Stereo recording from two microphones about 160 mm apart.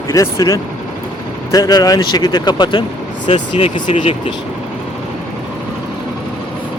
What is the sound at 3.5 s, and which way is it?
Speech, 50° left (ahead or behind).